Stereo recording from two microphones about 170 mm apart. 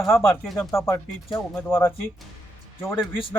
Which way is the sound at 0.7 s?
15° left (ahead or behind).